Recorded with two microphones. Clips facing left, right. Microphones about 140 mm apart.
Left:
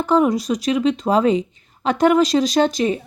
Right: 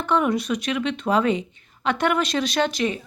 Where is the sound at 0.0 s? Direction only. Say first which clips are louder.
Left 5 dB; 35° left (ahead or behind).